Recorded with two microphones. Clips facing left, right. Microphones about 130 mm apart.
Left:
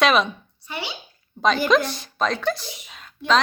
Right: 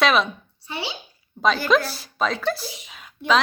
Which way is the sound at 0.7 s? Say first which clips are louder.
Right 1 dB; 30° right (ahead or behind).